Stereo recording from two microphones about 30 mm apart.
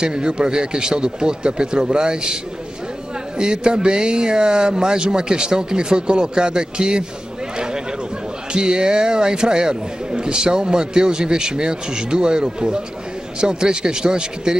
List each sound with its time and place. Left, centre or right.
0.0 s a man's voice: right
3.3 s a man's voice: right
7.5 s a sound: right
8.5 s a man's voice: right